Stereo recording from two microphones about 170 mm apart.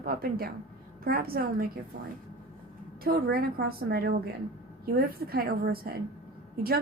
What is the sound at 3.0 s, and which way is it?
A woman's voice, 65° right (ahead or behind).